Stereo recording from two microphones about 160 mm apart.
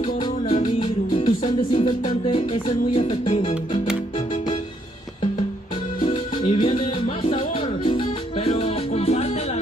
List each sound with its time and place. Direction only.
0.0 s music: 40° left (ahead or behind)
6.0 s music: 30° left (ahead or behind)
7.2 s salsa music: 35° left (ahead or behind)